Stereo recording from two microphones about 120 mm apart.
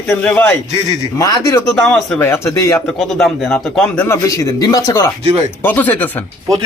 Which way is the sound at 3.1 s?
5° left (ahead or behind).